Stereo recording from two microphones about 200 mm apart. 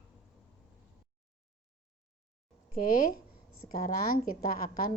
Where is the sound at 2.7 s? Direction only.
45° left (ahead or behind).